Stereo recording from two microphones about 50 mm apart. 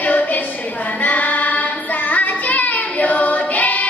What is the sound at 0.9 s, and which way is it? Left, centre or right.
Child singing, left.